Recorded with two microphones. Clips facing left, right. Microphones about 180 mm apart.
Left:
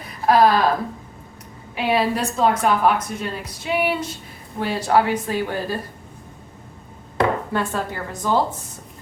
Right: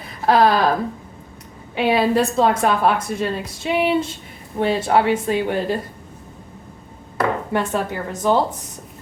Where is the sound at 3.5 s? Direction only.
25° right (ahead or behind).